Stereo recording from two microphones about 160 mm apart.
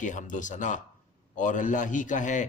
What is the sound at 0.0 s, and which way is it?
A man's voice, 50° left (ahead or behind).